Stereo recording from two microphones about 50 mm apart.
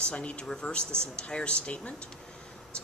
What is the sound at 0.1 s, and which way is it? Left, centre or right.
Speech, left.